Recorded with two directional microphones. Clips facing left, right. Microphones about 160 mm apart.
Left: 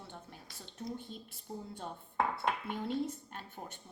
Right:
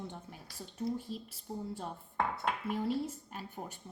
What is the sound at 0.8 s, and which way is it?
Speech, 5° right (ahead or behind).